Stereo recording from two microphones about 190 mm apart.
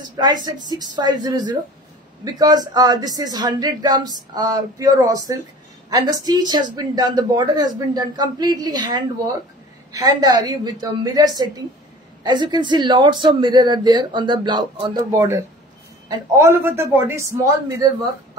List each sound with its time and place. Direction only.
0.2 s a man's voice: 20° right (ahead or behind)